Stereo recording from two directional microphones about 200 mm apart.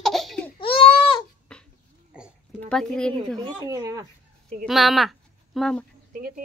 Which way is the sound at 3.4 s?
20° right (ahead or behind).